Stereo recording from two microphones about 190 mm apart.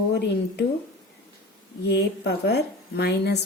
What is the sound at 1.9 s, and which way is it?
A woman's voice, 60° left (ahead or behind).